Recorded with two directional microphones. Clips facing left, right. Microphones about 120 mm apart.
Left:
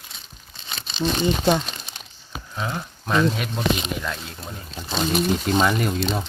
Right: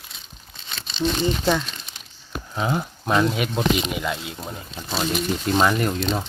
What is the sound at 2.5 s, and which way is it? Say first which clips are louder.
Speech: right 5 dB; 20° right (ahead or behind).